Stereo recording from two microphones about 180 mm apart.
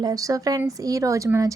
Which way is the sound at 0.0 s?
20° right (ahead or behind).